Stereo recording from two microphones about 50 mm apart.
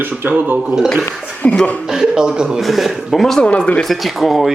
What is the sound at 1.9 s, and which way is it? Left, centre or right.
Speech, centre.